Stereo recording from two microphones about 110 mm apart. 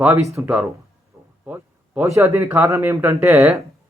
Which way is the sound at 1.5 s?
20° right (ahead or behind).